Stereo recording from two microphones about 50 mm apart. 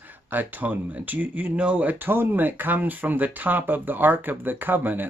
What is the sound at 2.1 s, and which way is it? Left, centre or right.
Speech, right.